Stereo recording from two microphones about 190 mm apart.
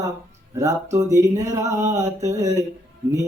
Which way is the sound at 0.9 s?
15° right (ahead or behind).